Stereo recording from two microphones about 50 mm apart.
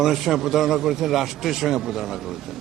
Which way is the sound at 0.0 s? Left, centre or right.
Centre.